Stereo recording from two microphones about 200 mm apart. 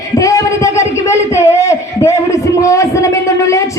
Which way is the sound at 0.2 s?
15° left (ahead or behind).